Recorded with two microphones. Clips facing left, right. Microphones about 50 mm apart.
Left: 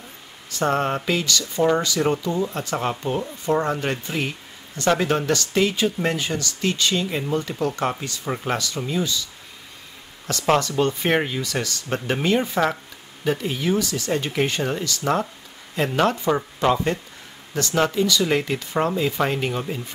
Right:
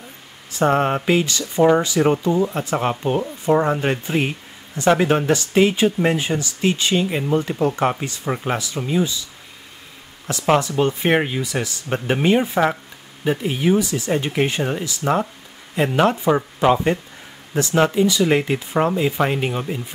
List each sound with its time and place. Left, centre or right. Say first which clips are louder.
0.6 s speech: right 4 dB; right
10.2 s speech: right 2 dB; centre